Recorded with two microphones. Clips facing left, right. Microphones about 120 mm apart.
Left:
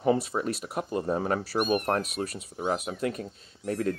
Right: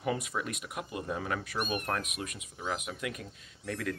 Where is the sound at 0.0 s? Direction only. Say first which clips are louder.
Left 8 dB; 35° left (ahead or behind).